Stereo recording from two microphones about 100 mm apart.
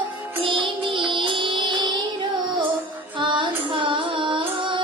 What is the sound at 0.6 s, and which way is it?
Music, 60° right (ahead or behind).